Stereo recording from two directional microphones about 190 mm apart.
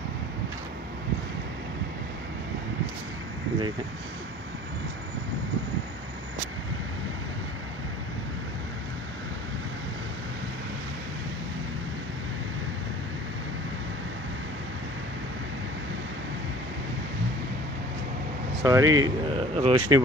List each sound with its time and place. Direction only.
18.6 s speech: 15° right (ahead or behind)
19.3 s speech: 30° right (ahead or behind)